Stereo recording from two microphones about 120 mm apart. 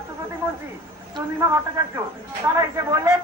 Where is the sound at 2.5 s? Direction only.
25° right (ahead or behind).